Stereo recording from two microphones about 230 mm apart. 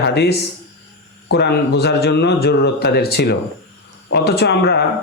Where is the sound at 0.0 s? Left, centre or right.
Left.